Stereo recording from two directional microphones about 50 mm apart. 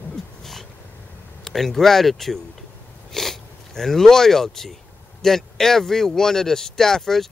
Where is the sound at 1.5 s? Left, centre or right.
Centre.